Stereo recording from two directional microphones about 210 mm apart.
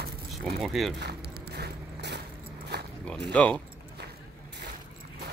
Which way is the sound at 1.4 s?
50° right (ahead or behind).